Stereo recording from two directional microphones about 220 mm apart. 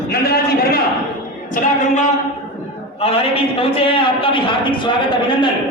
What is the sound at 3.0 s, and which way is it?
A man's voice, 25° left (ahead or behind).